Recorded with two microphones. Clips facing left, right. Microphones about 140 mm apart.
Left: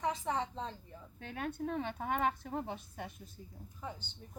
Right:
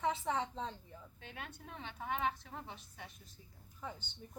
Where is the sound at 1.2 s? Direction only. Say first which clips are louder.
Left 13 dB; 50° left (ahead or behind).